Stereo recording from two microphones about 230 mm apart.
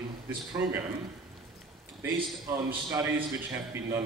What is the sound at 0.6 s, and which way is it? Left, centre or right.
Speech, centre.